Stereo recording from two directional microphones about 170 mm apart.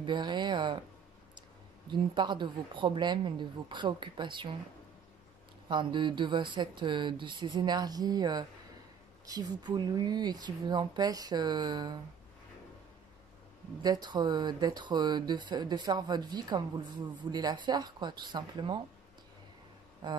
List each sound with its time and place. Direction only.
0.0 s speech: 25° right (ahead or behind)
1.9 s speech: 25° right (ahead or behind)
5.7 s speech: 25° right (ahead or behind)
13.8 s speech: 25° right (ahead or behind)
20.0 s speech: 25° right (ahead or behind)